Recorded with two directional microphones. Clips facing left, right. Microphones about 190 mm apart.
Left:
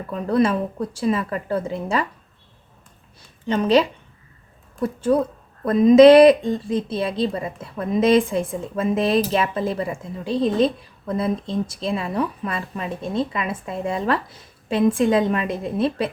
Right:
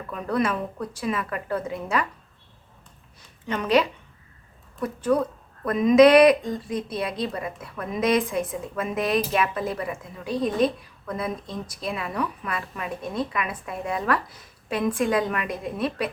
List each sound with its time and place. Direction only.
0.1 s a woman's voice: 30° left (ahead or behind)
3.4 s a woman's voice: 30° left (ahead or behind)